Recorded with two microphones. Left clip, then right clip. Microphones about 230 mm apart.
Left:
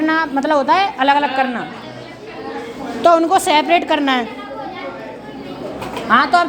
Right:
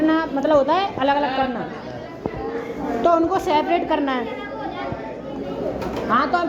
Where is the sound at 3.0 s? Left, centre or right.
Left.